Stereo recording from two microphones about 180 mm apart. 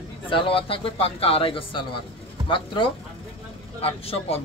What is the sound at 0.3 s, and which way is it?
A man's voice, 30° left (ahead or behind).